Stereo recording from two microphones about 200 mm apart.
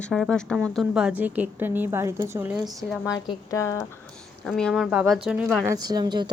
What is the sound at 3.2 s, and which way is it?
Speech, 15° left (ahead or behind).